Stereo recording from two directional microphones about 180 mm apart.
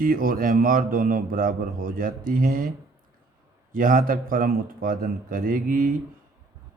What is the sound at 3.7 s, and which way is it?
Speech, 50° right (ahead or behind).